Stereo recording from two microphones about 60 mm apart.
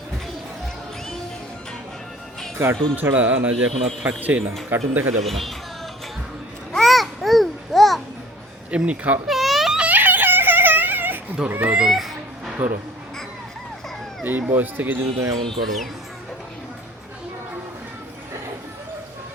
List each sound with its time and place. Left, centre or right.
2.9 s speech: right
4.7 s speech: right
5.2 s speech: centre
6.7 s babbling: centre
8.7 s speech: right
9.2 s a sound: centre
9.7 s a sound: right
11.4 s speech: right
11.8 s speech: centre
12.6 s speech: right
14.3 s speech: right